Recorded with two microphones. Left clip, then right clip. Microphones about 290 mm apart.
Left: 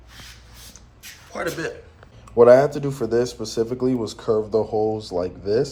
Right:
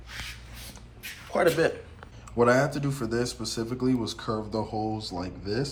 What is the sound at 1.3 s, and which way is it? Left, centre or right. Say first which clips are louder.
Speech: right 4 dB; centre.